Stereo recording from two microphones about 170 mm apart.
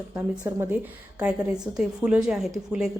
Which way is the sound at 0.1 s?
10° right (ahead or behind).